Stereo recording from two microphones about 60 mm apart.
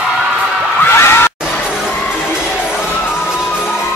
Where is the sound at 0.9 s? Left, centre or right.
Left.